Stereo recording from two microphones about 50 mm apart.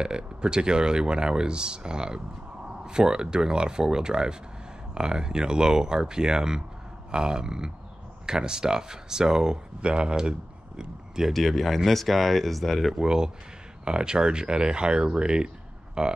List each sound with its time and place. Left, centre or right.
0.0 s speech: centre
11.3 s speech: centre
13.0 s speech: centre